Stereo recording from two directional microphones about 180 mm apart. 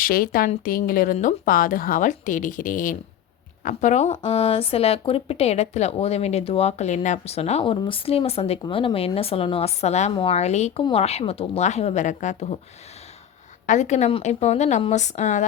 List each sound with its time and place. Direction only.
0.0 s speech: 55° left (ahead or behind)
13.7 s speech: 40° left (ahead or behind)